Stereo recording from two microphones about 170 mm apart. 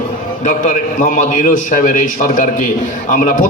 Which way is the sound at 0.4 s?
50° left (ahead or behind).